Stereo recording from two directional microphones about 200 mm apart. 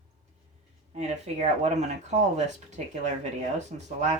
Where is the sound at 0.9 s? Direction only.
35° right (ahead or behind).